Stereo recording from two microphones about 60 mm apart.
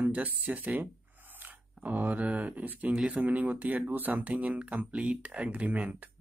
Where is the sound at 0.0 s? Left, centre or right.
Right.